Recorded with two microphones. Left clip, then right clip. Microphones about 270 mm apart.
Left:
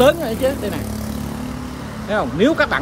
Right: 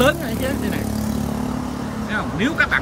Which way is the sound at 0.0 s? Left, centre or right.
Centre.